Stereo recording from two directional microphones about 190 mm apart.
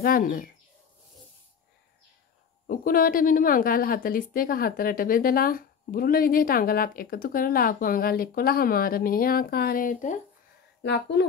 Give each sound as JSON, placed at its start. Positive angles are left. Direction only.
{"t": 0.0, "sound": "a woman's voice", "side_deg": 50}
{"t": 2.6, "sound": "a woman's voice", "side_deg": 50}
{"t": 10.8, "sound": "speech", "side_deg": 65}